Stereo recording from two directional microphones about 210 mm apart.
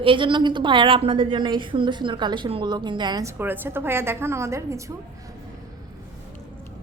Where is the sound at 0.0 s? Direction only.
25° right (ahead or behind).